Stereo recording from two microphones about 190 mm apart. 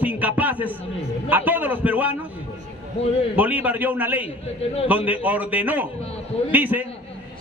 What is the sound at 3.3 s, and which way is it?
A man's voice, 10° right (ahead or behind).